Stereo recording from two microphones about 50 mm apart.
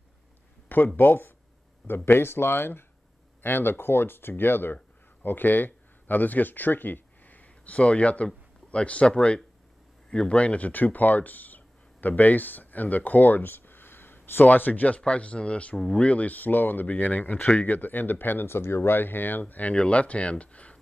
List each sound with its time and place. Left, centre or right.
0.9 s speech: left
14.5 s speech: left
15.0 s speech: left
19.4 s speech: left